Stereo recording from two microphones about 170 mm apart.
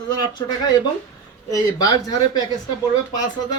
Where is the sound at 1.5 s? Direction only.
20° left (ahead or behind).